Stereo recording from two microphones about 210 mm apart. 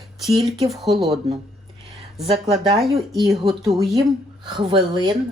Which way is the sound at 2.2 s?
30° right (ahead or behind).